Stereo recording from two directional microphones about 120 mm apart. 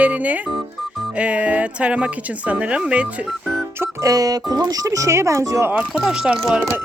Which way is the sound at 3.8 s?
30° right (ahead or behind).